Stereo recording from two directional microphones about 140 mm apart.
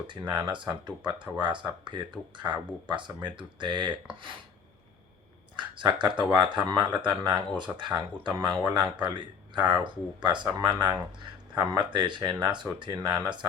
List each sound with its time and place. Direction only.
0.1 s speech: 35° right (ahead or behind)
5.5 s speech: 35° right (ahead or behind)